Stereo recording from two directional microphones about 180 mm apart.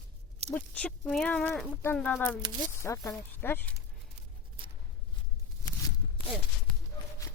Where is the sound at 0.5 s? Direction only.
5° left (ahead or behind).